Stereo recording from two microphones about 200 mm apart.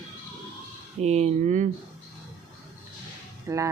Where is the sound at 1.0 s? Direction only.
35° right (ahead or behind).